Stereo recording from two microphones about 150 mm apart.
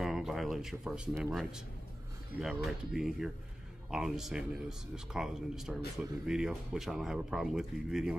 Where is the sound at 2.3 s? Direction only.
5° right (ahead or behind).